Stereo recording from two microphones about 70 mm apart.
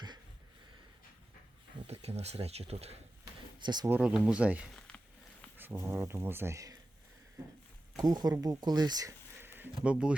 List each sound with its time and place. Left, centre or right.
3.6 s speech: right
4.0 s speech: centre
4.9 s a sound: centre
5.5 s speech: right
7.9 s speech: right
9.4 s a sound: right
9.8 s speech: centre